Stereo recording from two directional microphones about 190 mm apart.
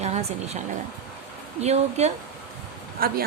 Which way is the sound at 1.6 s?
35° right (ahead or behind).